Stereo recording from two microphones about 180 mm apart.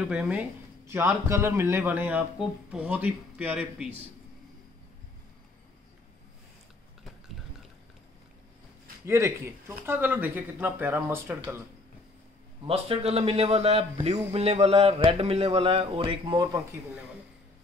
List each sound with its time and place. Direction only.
0.0 s speech: 5° right (ahead or behind)
9.0 s speech: 15° right (ahead or behind)
12.6 s a man's voice: 30° right (ahead or behind)